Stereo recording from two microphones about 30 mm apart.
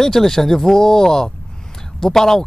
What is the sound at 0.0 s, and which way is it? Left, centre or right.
Speech, centre.